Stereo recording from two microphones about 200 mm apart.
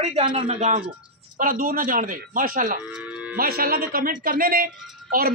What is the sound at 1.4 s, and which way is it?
A man's voice, 45° right (ahead or behind).